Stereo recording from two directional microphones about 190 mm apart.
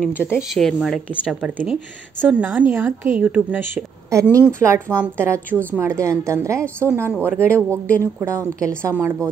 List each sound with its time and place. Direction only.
0.1 s a woman's voice: 10° left (ahead or behind); by 7.8 s 15° right (ahead or behind)
7.8 s speech: 10° left (ahead or behind)
8.2 s a woman's voice: 15° right (ahead or behind)